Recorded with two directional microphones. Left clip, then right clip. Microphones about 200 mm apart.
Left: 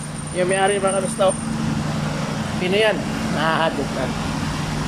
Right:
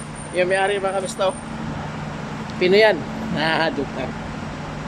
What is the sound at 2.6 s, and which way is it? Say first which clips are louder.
Speech: right 4 dB; 25° right (ahead or behind).